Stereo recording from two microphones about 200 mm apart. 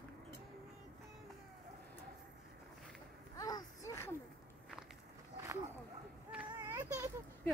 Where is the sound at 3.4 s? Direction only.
20° left (ahead or behind).